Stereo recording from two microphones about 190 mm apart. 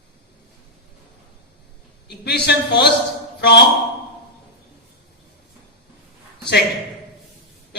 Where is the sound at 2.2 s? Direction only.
60° left (ahead or behind).